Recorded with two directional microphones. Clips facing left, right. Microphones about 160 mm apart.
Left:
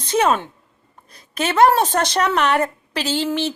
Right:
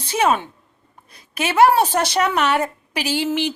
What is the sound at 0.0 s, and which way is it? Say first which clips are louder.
A woman's voice: left 1 dB; 10° right (ahead or behind).